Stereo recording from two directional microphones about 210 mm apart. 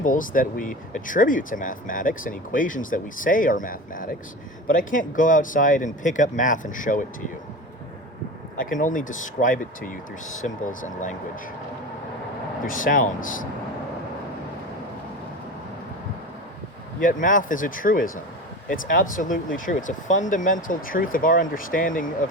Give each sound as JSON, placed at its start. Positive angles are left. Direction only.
{"t": 0.0, "sound": "speech", "side_deg": 40}
{"t": 8.5, "sound": "speech", "side_deg": 40}
{"t": 12.6, "sound": "speech", "side_deg": 40}
{"t": 17.0, "sound": "speech", "side_deg": 40}